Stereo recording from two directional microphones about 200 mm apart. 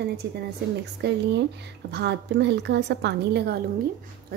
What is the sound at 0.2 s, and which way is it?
Speech, 60° right (ahead or behind).